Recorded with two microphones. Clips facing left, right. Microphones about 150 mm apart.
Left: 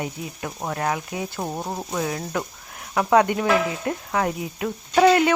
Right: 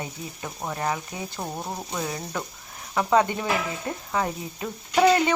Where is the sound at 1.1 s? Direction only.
15° left (ahead or behind).